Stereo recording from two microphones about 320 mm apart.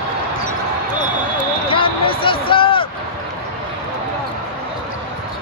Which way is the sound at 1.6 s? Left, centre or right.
Centre.